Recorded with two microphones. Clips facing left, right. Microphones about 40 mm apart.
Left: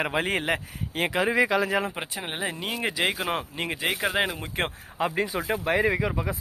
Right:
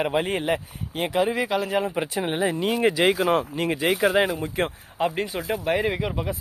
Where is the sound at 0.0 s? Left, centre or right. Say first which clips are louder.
Right 2 dB; left.